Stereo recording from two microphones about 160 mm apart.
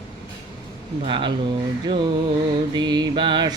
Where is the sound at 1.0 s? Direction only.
30° right (ahead or behind).